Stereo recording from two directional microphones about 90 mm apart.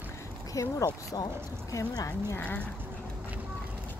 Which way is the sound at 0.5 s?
35° left (ahead or behind).